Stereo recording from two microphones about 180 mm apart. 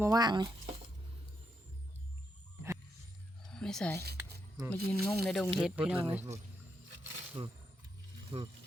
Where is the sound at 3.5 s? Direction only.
5° left (ahead or behind).